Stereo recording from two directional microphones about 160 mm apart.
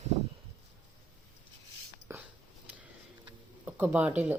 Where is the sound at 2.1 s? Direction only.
15° right (ahead or behind).